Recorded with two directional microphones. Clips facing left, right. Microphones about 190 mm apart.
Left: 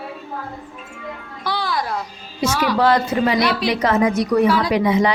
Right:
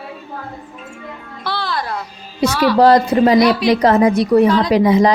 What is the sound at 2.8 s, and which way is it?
A woman's voice, 35° right (ahead or behind).